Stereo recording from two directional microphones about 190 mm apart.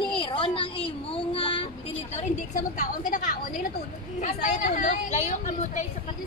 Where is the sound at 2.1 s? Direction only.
40° left (ahead or behind).